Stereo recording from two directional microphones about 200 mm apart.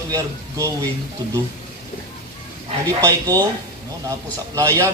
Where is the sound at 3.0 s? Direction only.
15° right (ahead or behind).